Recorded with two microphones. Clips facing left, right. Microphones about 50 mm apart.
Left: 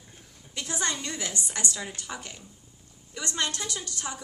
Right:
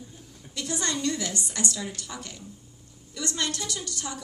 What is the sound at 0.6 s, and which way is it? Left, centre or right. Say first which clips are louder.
Speech: right 2 dB; left.